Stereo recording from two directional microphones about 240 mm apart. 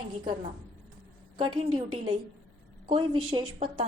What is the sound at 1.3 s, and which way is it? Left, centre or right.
Speech, centre.